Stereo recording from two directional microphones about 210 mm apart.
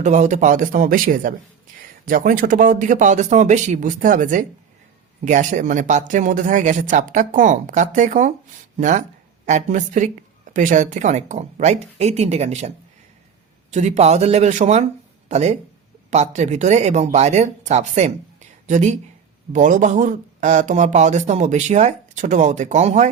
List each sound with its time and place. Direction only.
0.0 s speech: 35° right (ahead or behind)